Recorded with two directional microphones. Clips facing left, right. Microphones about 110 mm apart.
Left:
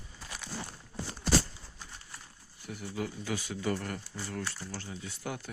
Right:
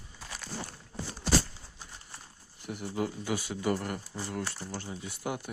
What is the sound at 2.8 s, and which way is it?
Speech, 40° right (ahead or behind).